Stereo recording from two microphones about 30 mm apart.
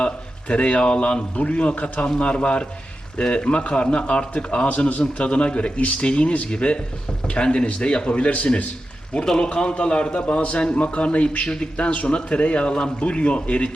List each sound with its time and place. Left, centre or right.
0.0 s a man's voice: left
2.1 s a man's voice: left
8.1 s speech: left
9.4 s a man's voice: left